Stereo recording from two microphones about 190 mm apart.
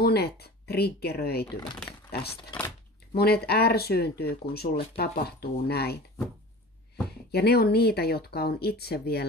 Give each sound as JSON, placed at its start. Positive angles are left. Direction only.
{"t": 0.0, "sound": "speech", "side_deg": 55}
{"t": 1.4, "sound": "speech", "side_deg": 5}
{"t": 2.5, "sound": "speech", "side_deg": 25}
{"t": 3.1, "sound": "speech", "side_deg": 55}
{"t": 7.2, "sound": "speech", "side_deg": 55}